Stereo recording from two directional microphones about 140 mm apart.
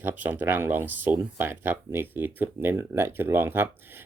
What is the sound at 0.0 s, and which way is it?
Speech, 15° right (ahead or behind).